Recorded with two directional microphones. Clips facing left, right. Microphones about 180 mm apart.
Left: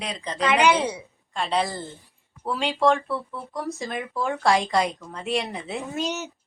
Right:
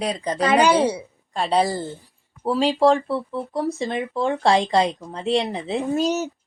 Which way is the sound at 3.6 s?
Centre (ahead or behind).